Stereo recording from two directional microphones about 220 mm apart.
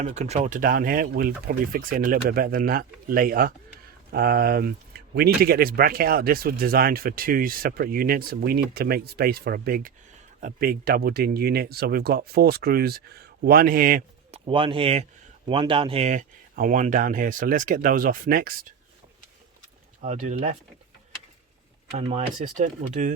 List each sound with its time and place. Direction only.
0.0 s speech: 30° right (ahead or behind)
14.3 s speech: 25° right (ahead or behind); by 18.5 s 40° right (ahead or behind)
20.0 s speech: 30° right (ahead or behind)
21.9 s speech: 30° right (ahead or behind)